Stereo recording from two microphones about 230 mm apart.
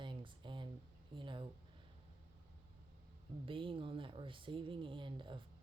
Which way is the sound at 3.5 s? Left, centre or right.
Right.